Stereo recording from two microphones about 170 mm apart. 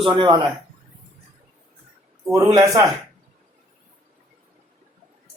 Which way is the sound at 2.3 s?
20° right (ahead or behind).